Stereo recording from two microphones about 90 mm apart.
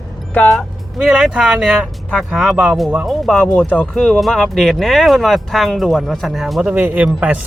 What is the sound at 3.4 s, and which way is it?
Speech, 15° left (ahead or behind).